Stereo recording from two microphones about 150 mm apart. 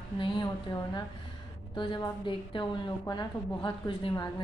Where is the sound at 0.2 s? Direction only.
30° left (ahead or behind).